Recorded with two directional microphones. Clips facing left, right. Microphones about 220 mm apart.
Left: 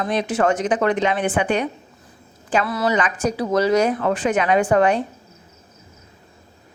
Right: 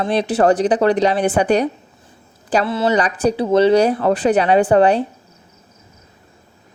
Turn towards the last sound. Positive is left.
turn(degrees=-30)  # may be behind; listen again after turning